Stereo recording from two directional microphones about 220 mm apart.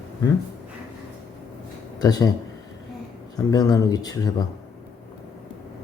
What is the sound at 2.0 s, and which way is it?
Speech, 15° left (ahead or behind).